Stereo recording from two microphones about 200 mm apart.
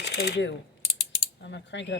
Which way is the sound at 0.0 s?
60° left (ahead or behind).